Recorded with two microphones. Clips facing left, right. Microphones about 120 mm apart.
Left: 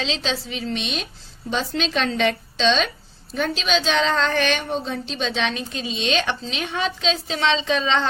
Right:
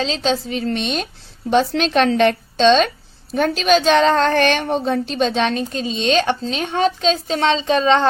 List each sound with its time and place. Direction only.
0.0 s a woman's voice: 45° right (ahead or behind)
1.5 s a woman's voice: 60° right (ahead or behind)